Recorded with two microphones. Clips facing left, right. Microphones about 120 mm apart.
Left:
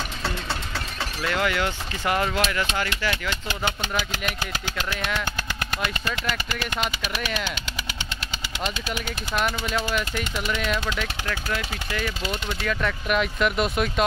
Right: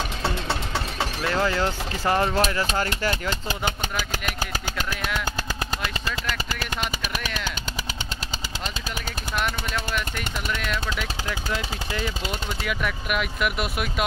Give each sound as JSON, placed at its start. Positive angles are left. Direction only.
{"t": 1.3, "sound": "speech", "side_deg": -30}
{"t": 9.9, "sound": "speech", "side_deg": 5}
{"t": 11.5, "sound": "speech", "side_deg": -25}
{"t": 12.6, "sound": "speech", "side_deg": -5}